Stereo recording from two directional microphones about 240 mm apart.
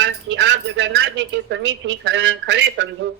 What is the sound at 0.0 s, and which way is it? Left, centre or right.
Speech, right.